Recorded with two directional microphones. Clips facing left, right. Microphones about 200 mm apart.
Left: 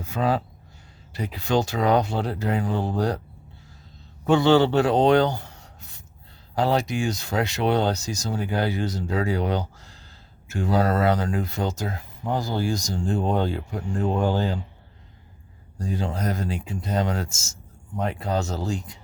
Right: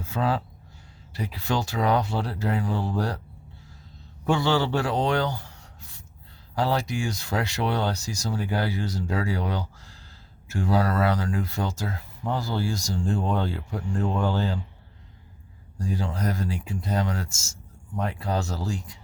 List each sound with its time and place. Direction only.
0.0 s speech: 15° left (ahead or behind)
4.3 s speech: 20° left (ahead or behind)
15.8 s speech: 20° left (ahead or behind)